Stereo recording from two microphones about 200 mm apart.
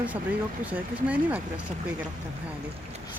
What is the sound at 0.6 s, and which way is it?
Speech, 5° right (ahead or behind).